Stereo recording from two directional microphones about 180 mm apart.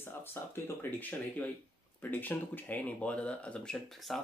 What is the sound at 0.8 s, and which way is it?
Speech, 10° left (ahead or behind).